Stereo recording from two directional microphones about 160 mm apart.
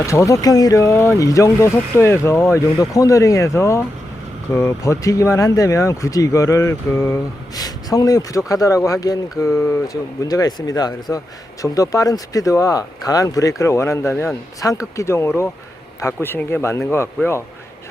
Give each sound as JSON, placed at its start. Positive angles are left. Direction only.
{"t": 0.0, "sound": "speech", "side_deg": 20}